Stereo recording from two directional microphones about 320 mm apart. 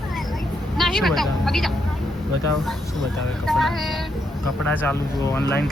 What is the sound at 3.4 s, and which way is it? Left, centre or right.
Speech, centre.